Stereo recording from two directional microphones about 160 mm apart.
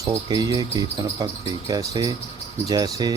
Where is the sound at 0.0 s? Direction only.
25° right (ahead or behind).